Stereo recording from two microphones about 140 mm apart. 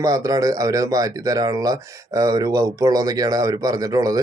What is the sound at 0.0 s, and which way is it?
A man's voice, 25° right (ahead or behind).